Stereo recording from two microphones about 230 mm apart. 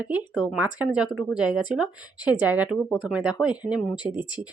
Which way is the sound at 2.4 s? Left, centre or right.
Centre.